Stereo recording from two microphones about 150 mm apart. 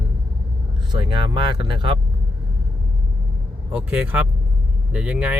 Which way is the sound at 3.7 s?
10° right (ahead or behind).